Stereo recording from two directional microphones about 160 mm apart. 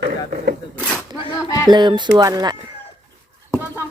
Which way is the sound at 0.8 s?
5° left (ahead or behind).